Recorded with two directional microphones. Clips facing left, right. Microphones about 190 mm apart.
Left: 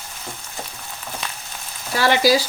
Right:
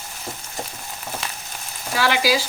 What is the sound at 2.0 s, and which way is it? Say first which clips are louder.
Frying: left 4 dB; 40° left (ahead or behind).